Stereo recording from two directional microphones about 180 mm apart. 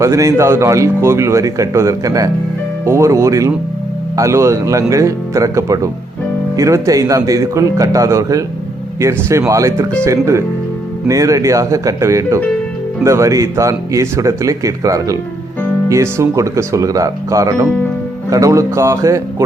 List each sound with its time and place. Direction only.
0.0 s a man's voice: 15° right (ahead or behind)